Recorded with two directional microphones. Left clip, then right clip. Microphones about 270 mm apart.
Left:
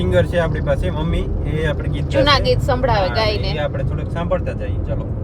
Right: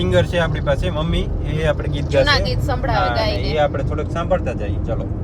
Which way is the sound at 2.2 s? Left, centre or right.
Left.